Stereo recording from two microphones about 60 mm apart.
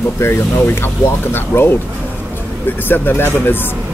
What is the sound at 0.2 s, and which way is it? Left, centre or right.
Speech, left.